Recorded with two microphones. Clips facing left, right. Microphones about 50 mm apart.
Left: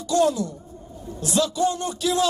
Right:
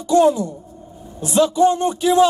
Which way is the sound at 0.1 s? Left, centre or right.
Right.